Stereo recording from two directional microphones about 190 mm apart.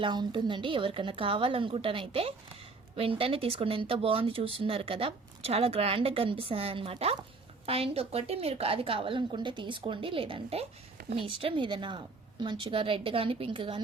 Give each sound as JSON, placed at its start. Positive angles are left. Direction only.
{"t": 0.0, "sound": "speech", "side_deg": -25}